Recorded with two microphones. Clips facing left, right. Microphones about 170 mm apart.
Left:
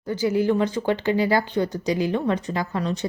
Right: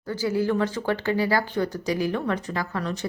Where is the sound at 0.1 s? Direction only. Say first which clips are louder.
Left 3 dB; 20° left (ahead or behind).